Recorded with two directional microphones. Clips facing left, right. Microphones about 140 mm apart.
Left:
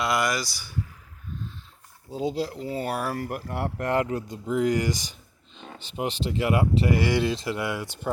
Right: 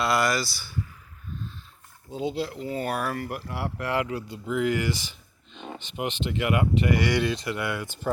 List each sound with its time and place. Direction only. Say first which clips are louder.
0.0 s speech: right 1 dB; 15° left (ahead or behind)
2.1 s speech: left 1 dB; 40° left (ahead or behind); by 7.9 s 20° left (ahead or behind)
8.1 s speech: right 1 dB; 5° left (ahead or behind)